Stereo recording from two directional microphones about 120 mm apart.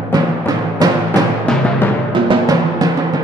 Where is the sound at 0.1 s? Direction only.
35° right (ahead or behind).